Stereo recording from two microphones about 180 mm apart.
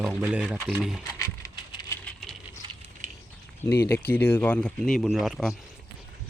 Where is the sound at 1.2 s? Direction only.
20° left (ahead or behind).